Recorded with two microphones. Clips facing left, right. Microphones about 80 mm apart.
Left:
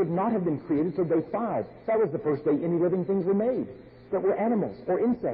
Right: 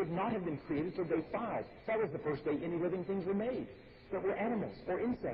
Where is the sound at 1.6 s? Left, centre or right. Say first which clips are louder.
Left 10 dB; left.